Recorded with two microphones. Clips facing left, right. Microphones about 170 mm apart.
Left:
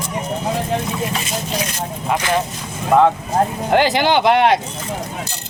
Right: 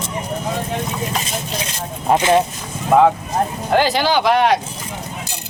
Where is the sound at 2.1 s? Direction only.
20° right (ahead or behind).